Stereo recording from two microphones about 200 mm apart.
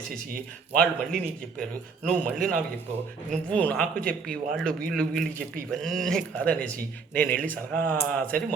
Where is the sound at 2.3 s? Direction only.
45° right (ahead or behind).